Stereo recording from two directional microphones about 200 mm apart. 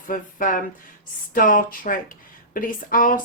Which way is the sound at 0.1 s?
40° left (ahead or behind).